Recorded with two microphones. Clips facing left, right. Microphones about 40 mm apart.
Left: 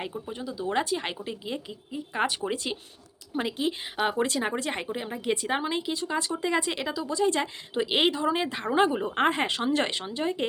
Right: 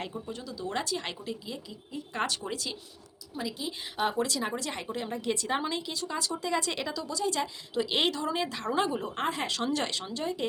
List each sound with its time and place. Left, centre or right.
0.0 s speech: centre
1.9 s speech: centre
3.3 s a woman's voice: left
4.0 s speech: left
4.9 s speech: centre